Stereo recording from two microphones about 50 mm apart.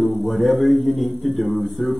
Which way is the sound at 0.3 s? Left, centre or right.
Centre.